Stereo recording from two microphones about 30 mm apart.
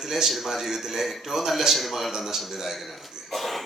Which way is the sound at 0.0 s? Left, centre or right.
Centre.